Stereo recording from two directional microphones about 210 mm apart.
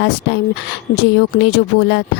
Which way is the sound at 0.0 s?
55° left (ahead or behind).